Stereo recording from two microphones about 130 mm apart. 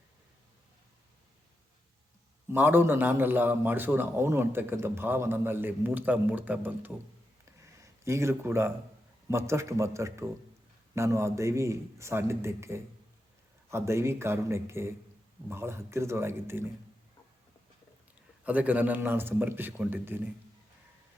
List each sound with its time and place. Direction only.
2.5 s a man's voice: 15° right (ahead or behind)
7.4 s a sound: 25° right (ahead or behind)
9.3 s a man's voice: 20° right (ahead or behind)
18.4 s a man's voice: 10° right (ahead or behind)